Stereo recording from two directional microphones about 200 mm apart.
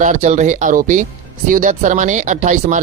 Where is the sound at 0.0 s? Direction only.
40° right (ahead or behind).